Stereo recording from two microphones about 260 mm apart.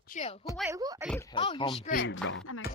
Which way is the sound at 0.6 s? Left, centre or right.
Centre.